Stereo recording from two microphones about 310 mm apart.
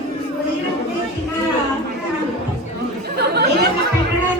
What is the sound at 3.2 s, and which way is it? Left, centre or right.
Chatter, right.